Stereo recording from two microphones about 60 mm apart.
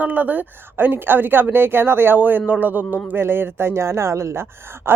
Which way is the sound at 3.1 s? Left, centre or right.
Right.